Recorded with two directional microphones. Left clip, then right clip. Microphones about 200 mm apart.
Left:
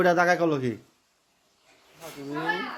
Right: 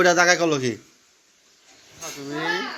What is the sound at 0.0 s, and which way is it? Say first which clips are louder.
Speech: right 4 dB; 15° left (ahead or behind).